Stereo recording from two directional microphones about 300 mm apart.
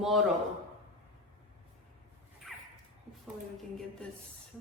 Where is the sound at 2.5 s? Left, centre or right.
Centre.